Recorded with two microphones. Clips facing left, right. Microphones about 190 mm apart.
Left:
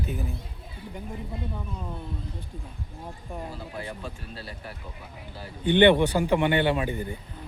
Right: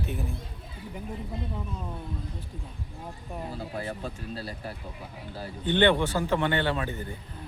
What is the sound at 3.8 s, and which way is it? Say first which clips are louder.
Speech: right 3 dB; 40° right (ahead or behind).